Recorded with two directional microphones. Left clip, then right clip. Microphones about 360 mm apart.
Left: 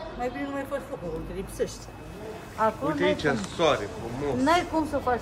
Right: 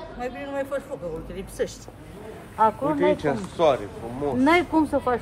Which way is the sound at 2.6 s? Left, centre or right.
Right.